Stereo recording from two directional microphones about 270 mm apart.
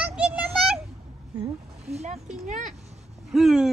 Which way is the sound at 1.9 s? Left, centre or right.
Right.